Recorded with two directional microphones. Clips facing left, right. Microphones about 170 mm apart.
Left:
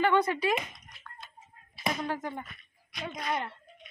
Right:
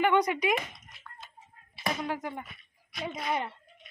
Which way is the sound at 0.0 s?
15° right (ahead or behind).